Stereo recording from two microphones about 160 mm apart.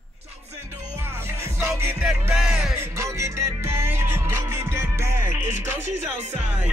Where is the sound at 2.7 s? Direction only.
15° right (ahead or behind).